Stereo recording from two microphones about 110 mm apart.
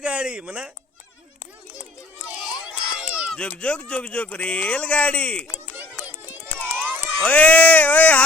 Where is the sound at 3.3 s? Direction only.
10° left (ahead or behind).